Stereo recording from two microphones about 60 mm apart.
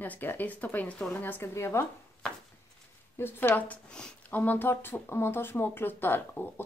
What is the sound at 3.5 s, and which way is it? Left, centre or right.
Speech, left.